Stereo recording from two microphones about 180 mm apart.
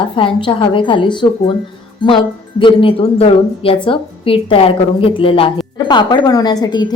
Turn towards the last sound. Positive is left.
turn(degrees=20)  # may be behind; listen again after turning